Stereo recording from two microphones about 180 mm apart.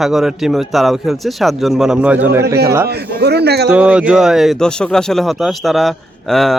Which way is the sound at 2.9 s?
65° right (ahead or behind).